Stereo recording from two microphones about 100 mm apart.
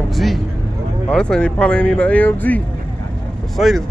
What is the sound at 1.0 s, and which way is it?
Speech, 10° left (ahead or behind).